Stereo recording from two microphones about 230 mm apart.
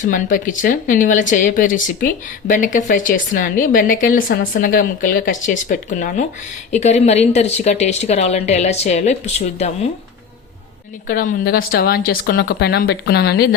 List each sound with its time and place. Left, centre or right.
0.0 s speech: left
11.1 s speech: left